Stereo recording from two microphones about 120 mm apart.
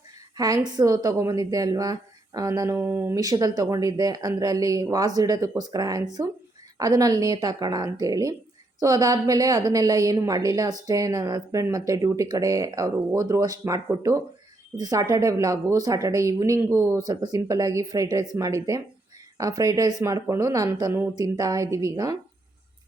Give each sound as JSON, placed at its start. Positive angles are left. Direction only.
{"t": 0.3, "sound": "a woman's voice", "side_deg": -30}
{"t": 3.2, "sound": "a woman's voice", "side_deg": -30}